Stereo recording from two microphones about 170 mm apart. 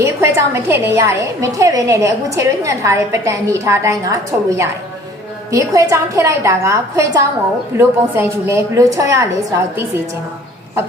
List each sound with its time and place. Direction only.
0.0 s a woman's voice: 15° right (ahead or behind)